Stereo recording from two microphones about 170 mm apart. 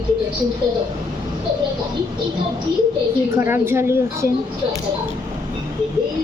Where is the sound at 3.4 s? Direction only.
15° right (ahead or behind).